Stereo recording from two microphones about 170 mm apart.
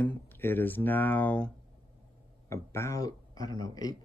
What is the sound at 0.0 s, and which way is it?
Speech, 10° left (ahead or behind).